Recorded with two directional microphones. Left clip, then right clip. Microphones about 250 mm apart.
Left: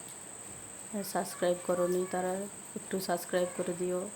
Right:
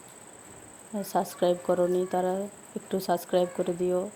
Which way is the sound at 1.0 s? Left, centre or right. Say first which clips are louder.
Right 6 dB; centre.